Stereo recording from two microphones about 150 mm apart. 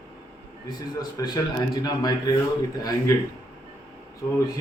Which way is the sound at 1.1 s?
25° left (ahead or behind).